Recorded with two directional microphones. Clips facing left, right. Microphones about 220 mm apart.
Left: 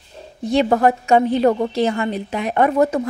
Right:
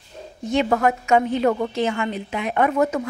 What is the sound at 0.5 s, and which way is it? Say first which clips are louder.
Speech: left 4 dB; 35° left (ahead or behind).